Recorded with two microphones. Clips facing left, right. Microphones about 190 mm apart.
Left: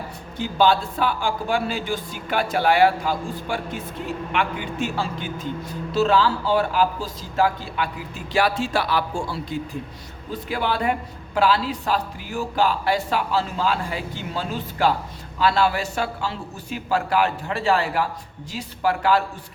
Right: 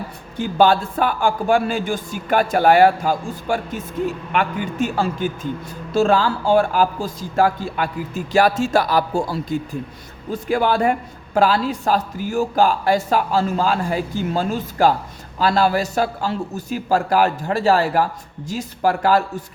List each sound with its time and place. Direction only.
0.3 s a man's voice: 50° right (ahead or behind)